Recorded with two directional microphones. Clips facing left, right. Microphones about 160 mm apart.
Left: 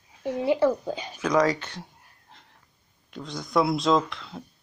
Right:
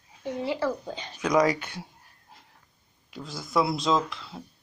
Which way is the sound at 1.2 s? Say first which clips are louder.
Even; 10° right (ahead or behind).